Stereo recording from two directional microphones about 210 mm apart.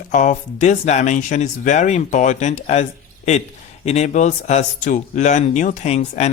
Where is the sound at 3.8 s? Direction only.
30° left (ahead or behind).